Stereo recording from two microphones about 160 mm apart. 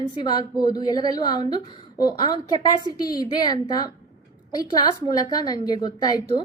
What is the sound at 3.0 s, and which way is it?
A woman's voice, 25° left (ahead or behind).